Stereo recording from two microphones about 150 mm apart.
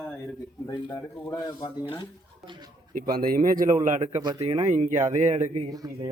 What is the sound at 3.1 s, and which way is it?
Speech, 70° right (ahead or behind).